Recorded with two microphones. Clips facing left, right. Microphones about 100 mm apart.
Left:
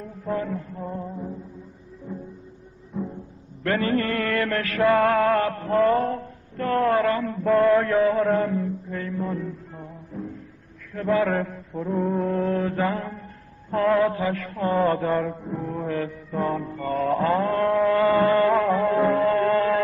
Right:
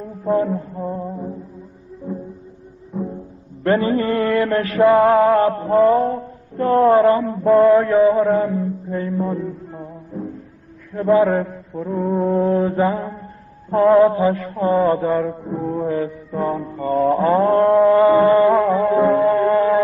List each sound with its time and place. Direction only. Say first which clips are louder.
0.2 s music: right 9 dB; 25° right (ahead or behind)
3.6 s music: right 6 dB; 25° right (ahead or behind)
6.5 s mantra: right 8 dB; 25° right (ahead or behind)
11.2 s mantra: right 6 dB; 15° right (ahead or behind)
11.7 s mantra: right 2 dB; centre (ahead or behind)
12.2 s music: right 7 dB; 25° right (ahead or behind)
14.9 s mantra: right 5 dB; 15° right (ahead or behind)
15.4 s music: right 7 dB; 20° right (ahead or behind)
16.0 s mantra: right 4 dB; centre (ahead or behind)
16.5 s mantra: right 3 dB; 20° right (ahead or behind)
17.4 s mantra: right 8 dB; 30° right (ahead or behind)
17.6 s music: right 6 dB; 25° right (ahead or behind)
18.1 s mantra: right 6 dB; 10° right (ahead or behind)
18.5 s music: right 5 dB; 15° right (ahead or behind)